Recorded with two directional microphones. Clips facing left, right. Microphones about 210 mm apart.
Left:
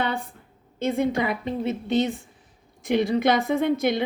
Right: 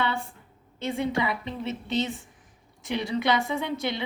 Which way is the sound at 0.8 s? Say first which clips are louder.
Left 4 dB; 50° left (ahead or behind).